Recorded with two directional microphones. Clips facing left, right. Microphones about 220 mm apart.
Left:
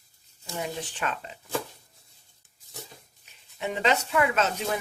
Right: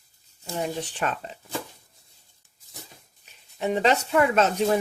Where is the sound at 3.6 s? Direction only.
35° right (ahead or behind).